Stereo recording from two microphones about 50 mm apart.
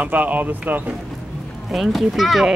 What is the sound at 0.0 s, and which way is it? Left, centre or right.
Speech, right.